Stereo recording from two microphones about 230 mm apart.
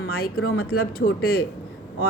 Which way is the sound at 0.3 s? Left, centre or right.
Left.